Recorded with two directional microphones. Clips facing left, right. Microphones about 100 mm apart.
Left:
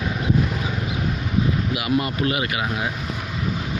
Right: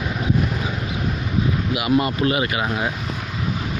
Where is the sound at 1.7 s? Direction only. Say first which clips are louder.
Right 3 dB; 30° right (ahead or behind).